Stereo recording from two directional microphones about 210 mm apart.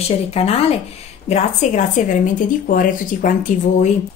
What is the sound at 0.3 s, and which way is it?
A woman's voice, 30° left (ahead or behind).